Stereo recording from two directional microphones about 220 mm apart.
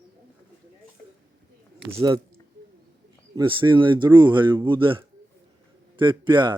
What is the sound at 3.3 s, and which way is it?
A man's voice, 20° right (ahead or behind).